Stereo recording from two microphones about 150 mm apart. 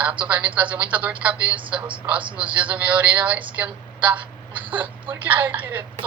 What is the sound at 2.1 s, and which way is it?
Speech, 35° right (ahead or behind).